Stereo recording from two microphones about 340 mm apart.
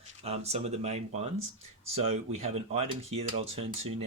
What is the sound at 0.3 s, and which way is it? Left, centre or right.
Speech, centre.